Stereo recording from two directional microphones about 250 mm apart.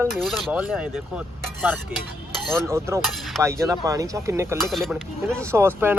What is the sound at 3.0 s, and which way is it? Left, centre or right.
Speech, centre.